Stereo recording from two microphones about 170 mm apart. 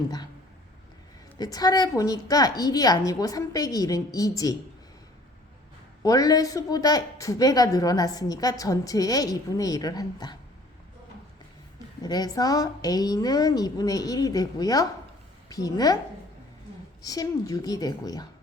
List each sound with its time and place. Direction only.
1.4 s a woman's voice: 20° left (ahead or behind)
6.0 s a woman's voice: 20° left (ahead or behind)
12.0 s a woman's voice: 25° left (ahead or behind)
17.0 s a woman's voice: 20° left (ahead or behind)